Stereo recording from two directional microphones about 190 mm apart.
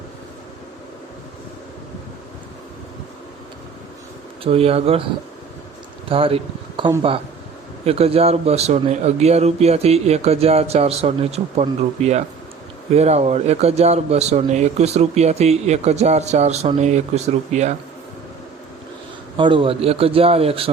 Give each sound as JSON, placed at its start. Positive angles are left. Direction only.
{"t": 4.4, "sound": "a man's voice", "side_deg": -30}
{"t": 6.1, "sound": "a man's voice", "side_deg": -30}
{"t": 19.4, "sound": "a man's voice", "side_deg": -25}